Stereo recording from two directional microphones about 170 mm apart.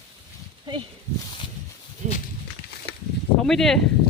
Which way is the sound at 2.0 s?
45° right (ahead or behind).